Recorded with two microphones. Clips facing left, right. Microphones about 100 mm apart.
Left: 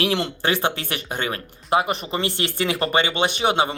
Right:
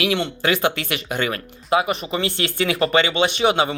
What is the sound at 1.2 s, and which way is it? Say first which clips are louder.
Speech: right 3 dB; 25° left (ahead or behind).